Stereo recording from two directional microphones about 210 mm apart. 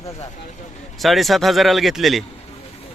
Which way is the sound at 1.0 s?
Centre (ahead or behind).